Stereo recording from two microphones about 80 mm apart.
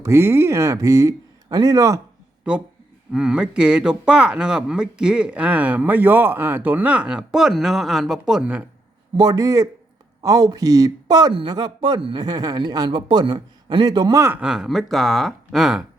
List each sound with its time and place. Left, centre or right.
0.0 s speech: right
3.1 s speech: centre
8.2 s speech: centre
9.1 s speech: right
11.3 s speech: right
14.4 s speech: centre